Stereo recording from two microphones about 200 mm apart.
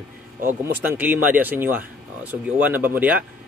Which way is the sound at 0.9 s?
10° right (ahead or behind).